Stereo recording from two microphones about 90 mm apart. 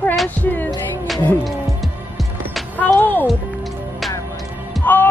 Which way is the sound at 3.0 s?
20° left (ahead or behind).